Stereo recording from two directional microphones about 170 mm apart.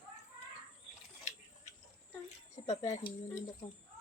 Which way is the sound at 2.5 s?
40° left (ahead or behind).